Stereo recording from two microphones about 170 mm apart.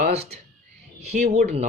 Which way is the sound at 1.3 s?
40° right (ahead or behind).